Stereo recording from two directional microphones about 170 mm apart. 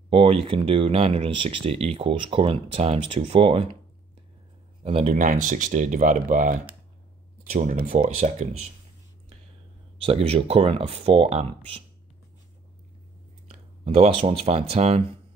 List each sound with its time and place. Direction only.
0.1 s speech: 35° right (ahead or behind)
4.8 s speech: 35° right (ahead or behind)
5.1 s speech: 50° right (ahead or behind)
10.0 s speech: 35° right (ahead or behind)
13.5 s speech: 35° right (ahead or behind)